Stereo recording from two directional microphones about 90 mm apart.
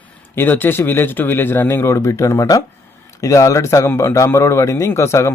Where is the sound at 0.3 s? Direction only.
20° left (ahead or behind).